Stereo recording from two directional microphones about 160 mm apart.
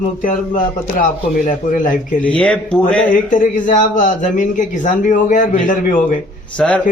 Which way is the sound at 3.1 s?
55° left (ahead or behind).